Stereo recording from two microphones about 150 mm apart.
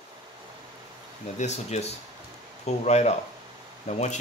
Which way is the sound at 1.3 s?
45° left (ahead or behind).